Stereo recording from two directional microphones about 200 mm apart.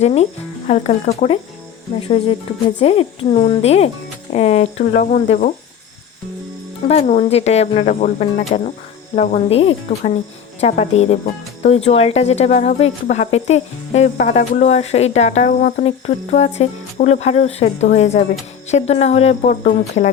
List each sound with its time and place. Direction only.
0.0 s speech: 35° left (ahead or behind)
6.8 s speech: 30° left (ahead or behind)